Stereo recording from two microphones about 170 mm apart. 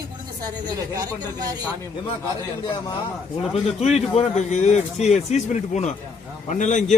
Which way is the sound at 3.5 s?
40° left (ahead or behind).